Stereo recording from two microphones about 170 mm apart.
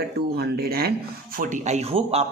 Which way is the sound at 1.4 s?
50° right (ahead or behind).